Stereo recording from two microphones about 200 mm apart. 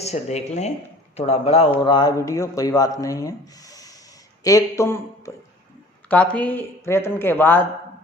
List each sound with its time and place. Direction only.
0.0 s speech: 35° left (ahead or behind); by 7.7 s 10° left (ahead or behind)